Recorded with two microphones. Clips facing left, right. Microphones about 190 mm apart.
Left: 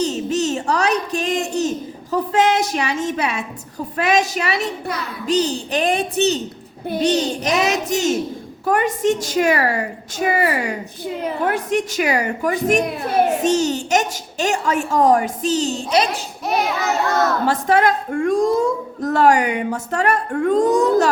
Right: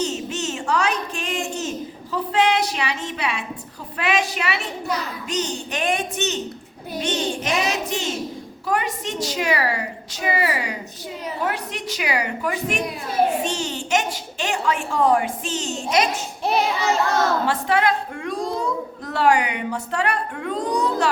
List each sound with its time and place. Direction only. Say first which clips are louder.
0.0 s a sound: left 6 dB; 35° left (ahead or behind)
3.9 s a child's voice: left 4 dB; 40° left (ahead or behind)
16.4 s a child's voice: even; 30° right (ahead or behind)
17.4 s a woman's voice: left 4 dB; 40° left (ahead or behind)